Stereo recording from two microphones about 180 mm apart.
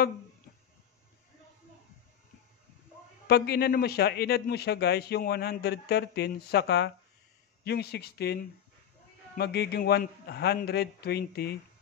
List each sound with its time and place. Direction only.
3.3 s a man's voice: 60° left (ahead or behind)
9.4 s a man's voice: 65° left (ahead or behind)